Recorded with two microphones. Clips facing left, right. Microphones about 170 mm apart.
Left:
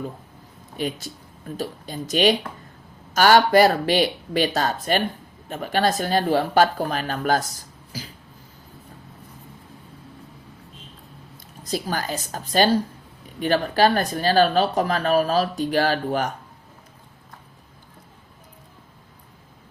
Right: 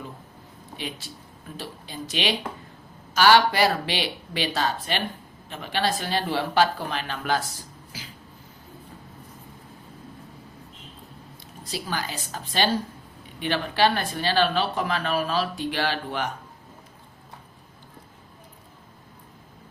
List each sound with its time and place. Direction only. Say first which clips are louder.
0.8 s speech: left 8 dB; 45° left (ahead or behind)
11.6 s speech: left 5 dB; 45° left (ahead or behind)